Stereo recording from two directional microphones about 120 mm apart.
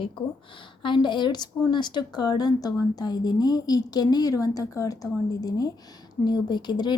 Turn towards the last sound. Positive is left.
turn(degrees=35)  # may be behind; listen again after turning